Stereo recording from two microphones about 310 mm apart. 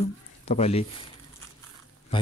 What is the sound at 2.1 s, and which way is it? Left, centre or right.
Speech, centre.